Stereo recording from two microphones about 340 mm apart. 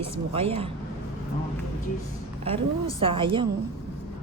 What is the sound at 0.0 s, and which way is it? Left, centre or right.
Speech, centre.